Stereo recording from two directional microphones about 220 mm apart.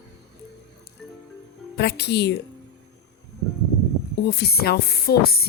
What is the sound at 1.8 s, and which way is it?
Speech, 50° left (ahead or behind).